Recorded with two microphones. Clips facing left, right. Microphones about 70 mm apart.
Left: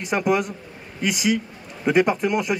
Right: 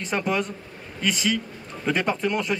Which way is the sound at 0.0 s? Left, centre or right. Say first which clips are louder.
Left 4 dB; centre.